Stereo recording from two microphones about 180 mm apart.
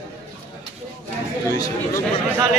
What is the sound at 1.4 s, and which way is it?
Speech, 15° left (ahead or behind).